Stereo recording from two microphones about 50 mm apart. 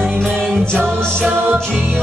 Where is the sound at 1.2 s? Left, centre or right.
Right.